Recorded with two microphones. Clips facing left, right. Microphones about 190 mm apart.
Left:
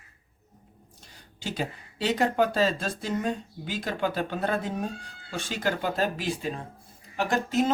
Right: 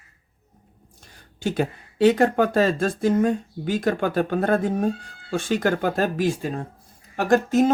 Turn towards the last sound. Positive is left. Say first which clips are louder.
# right 7 dB
turn(degrees=-45)  # may be behind; listen again after turning